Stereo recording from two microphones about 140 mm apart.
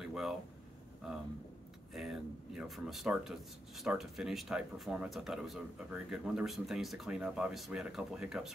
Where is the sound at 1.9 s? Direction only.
5° right (ahead or behind).